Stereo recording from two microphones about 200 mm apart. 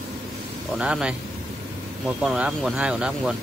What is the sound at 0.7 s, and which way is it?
Speech, 5° right (ahead or behind).